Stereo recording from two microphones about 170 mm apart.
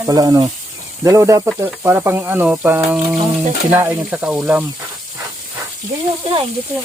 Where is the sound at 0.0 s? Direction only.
20° right (ahead or behind).